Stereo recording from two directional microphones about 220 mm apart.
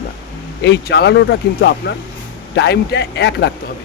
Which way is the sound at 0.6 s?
50° left (ahead or behind).